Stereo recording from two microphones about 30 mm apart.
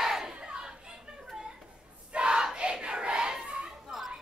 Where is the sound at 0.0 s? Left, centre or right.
Centre.